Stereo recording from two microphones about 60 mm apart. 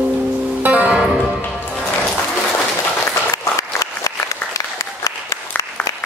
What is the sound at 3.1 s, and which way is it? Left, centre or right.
Applause, left.